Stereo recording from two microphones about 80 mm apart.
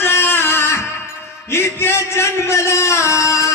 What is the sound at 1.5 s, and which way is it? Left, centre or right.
A man's voice, left.